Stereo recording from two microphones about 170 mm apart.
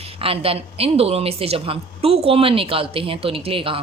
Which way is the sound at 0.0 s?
35° right (ahead or behind).